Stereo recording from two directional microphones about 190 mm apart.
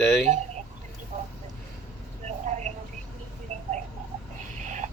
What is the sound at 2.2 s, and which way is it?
Vehicle, 35° right (ahead or behind).